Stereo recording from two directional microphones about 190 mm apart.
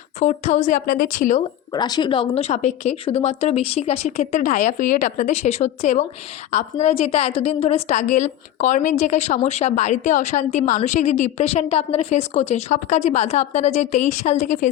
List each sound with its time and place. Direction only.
0.2 s a woman's voice: 35° left (ahead or behind)
1.7 s a woman's voice: 20° left (ahead or behind); by 14.7 s 40° left (ahead or behind)